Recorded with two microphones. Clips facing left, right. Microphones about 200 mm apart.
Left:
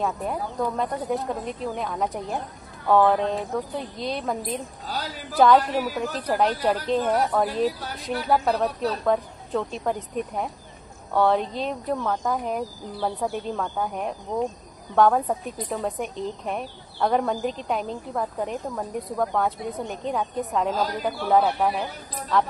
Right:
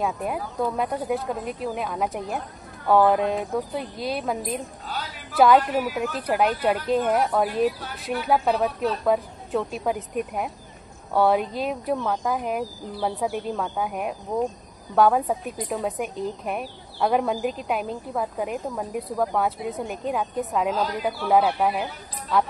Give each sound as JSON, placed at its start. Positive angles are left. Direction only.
{"t": 0.0, "sound": "a woman's voice", "side_deg": -10}
{"t": 4.8, "sound": "a sound", "side_deg": 40}
{"t": 5.4, "sound": "a woman's voice", "side_deg": -5}
{"t": 7.6, "sound": "speech", "side_deg": 35}
{"t": 8.3, "sound": "a woman's voice", "side_deg": -5}